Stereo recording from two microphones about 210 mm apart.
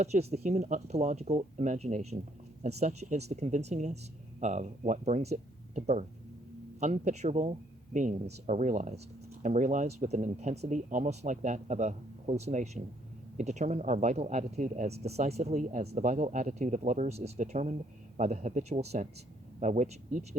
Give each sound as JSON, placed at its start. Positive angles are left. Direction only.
{"t": 0.0, "sound": "speech", "side_deg": -30}